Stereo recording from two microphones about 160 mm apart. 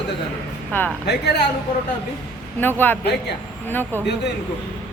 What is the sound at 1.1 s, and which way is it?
Speech, 90° left.